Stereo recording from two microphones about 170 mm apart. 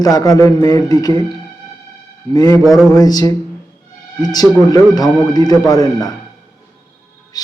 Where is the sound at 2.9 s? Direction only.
25° left (ahead or behind).